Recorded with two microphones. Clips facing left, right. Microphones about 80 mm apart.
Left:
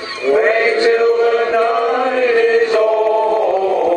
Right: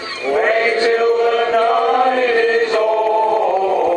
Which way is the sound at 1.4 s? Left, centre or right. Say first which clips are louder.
Even; centre.